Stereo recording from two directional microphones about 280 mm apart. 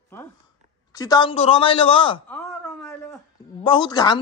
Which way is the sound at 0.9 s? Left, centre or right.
Centre.